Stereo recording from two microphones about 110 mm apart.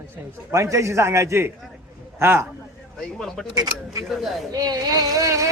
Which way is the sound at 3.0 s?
5° left (ahead or behind).